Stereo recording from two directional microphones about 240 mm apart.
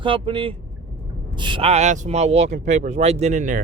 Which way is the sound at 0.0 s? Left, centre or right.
Right.